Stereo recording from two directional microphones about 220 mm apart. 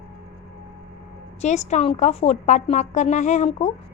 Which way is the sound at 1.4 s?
30° left (ahead or behind).